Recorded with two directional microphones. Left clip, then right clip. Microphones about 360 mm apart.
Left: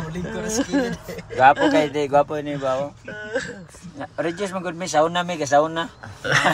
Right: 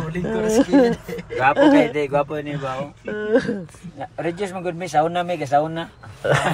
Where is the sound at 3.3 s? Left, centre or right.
Centre.